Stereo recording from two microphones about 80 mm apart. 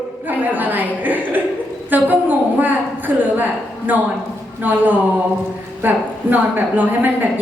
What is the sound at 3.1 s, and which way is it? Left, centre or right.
Speech, right.